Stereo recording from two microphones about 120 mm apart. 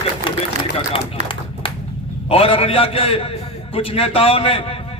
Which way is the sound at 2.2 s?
55° left (ahead or behind).